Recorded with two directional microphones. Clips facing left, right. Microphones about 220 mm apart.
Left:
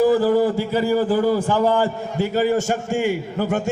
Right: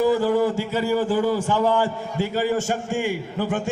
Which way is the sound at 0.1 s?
35° left (ahead or behind).